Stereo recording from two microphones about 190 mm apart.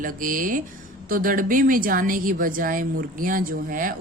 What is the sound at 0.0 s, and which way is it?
A woman's voice, 45° right (ahead or behind).